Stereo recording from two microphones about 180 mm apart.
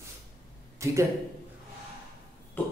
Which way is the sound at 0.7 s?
15° right (ahead or behind).